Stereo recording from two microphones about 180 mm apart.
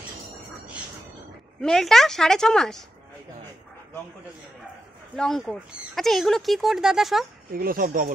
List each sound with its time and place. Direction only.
1.6 s speech: centre (ahead or behind)
5.1 s speech: centre (ahead or behind)
7.5 s speech: 55° right (ahead or behind)